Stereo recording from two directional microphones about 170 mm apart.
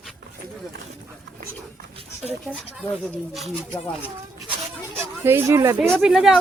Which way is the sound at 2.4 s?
Centre (ahead or behind).